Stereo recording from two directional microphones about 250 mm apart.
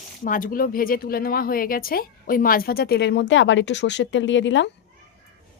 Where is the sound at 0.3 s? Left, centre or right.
Left.